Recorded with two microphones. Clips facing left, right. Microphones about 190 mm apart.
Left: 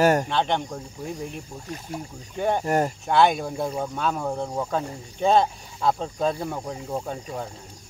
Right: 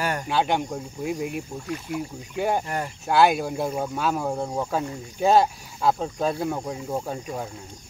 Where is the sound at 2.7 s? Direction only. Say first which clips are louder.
Left 7 dB; 45° left (ahead or behind).